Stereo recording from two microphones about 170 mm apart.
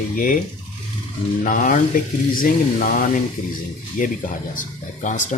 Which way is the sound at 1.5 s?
50° left (ahead or behind).